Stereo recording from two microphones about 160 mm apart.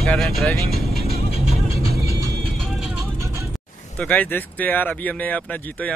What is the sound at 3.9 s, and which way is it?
Speech, 10° left (ahead or behind).